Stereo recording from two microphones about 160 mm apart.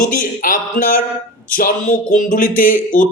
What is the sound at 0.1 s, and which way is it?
Speech, 55° left (ahead or behind).